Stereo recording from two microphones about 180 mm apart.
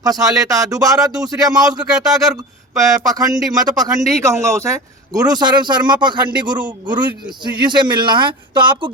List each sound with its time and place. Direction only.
0.0 s a man's voice: 20° right (ahead or behind)
3.1 s a man's voice: 20° right (ahead or behind)